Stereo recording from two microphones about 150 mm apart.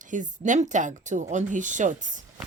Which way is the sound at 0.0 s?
55° right (ahead or behind).